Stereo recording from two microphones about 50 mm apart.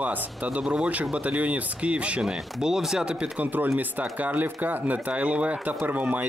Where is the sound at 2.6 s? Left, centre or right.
Centre.